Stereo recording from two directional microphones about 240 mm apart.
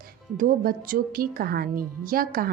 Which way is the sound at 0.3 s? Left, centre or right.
Right.